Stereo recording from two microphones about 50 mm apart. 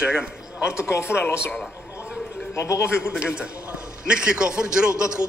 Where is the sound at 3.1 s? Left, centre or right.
Right.